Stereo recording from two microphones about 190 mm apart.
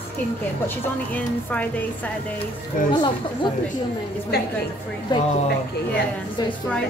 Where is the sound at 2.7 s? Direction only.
45° left (ahead or behind).